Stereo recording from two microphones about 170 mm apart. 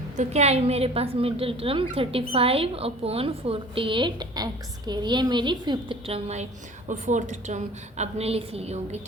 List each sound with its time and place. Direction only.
0.2 s a woman's voice: 40° right (ahead or behind)